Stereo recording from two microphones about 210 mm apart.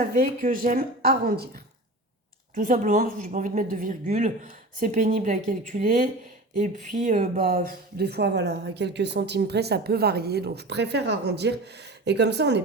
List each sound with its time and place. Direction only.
0.0 s speech: 40° right (ahead or behind)
2.6 s a woman's voice: 40° right (ahead or behind); by 12.6 s 55° right (ahead or behind)